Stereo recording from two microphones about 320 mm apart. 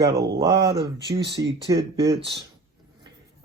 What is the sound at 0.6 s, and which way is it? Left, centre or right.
Speech, right.